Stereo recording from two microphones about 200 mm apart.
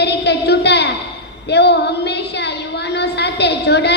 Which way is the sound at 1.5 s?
55° left (ahead or behind).